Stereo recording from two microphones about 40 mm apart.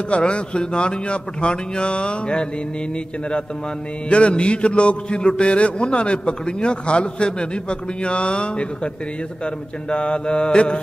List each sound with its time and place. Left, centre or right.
0.1 s a man's voice: left
4.1 s a man's voice: left
9.8 s a man's voice: left